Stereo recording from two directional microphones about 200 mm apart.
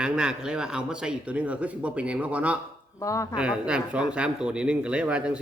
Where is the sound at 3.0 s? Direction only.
15° left (ahead or behind).